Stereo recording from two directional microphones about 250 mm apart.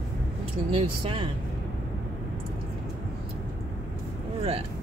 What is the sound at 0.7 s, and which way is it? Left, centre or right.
Speech, right.